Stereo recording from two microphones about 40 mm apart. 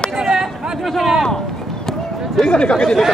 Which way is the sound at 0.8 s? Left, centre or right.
Centre.